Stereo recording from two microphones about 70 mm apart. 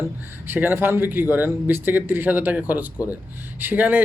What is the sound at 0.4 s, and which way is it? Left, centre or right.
Speech, right.